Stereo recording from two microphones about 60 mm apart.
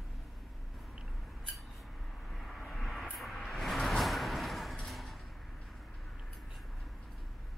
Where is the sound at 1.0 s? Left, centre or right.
Centre.